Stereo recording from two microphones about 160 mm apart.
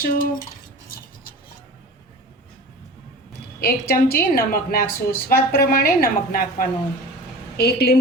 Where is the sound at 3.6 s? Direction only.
75° left (ahead or behind).